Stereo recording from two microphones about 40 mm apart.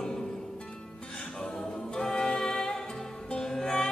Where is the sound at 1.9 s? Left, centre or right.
Centre.